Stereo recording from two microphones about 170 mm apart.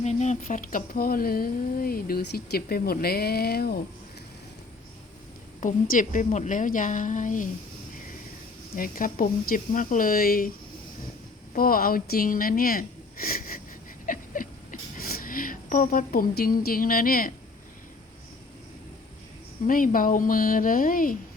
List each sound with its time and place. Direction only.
0.0 s speech: 40° left (ahead or behind); by 3.8 s 65° left (ahead or behind)
5.5 s a woman's voice: 50° left (ahead or behind)
8.7 s speech: 55° left (ahead or behind)
11.5 s speech: 60° left (ahead or behind)
14.1 s a sound: 55° left (ahead or behind)
19.6 s a woman's voice: 55° left (ahead or behind)